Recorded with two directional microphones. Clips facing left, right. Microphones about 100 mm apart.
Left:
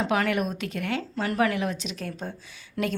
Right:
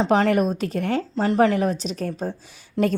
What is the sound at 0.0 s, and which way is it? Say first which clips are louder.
A woman's voice: right 6 dB; 35° right (ahead or behind).